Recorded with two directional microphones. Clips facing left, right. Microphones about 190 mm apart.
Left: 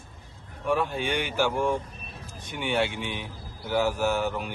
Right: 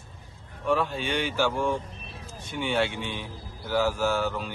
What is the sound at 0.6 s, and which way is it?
Speech, 15° left (ahead or behind).